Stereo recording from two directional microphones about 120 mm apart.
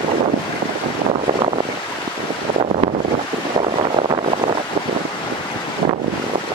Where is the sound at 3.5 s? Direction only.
50° right (ahead or behind).